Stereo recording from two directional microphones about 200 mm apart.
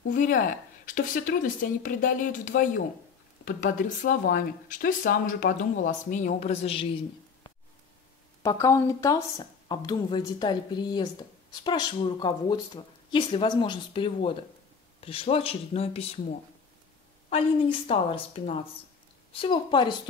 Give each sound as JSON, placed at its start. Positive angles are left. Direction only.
{"t": 0.1, "sound": "speech", "side_deg": 45}
{"t": 8.4, "sound": "speech", "side_deg": 15}
{"t": 17.3, "sound": "speech", "side_deg": 30}